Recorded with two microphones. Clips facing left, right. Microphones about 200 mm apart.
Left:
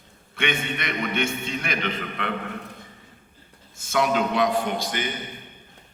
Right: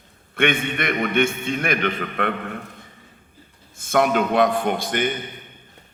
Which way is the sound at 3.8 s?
55° right (ahead or behind).